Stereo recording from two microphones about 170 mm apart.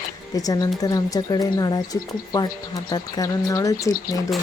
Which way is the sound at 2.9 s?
20° left (ahead or behind).